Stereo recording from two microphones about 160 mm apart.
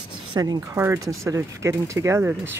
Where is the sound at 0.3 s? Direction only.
25° right (ahead or behind).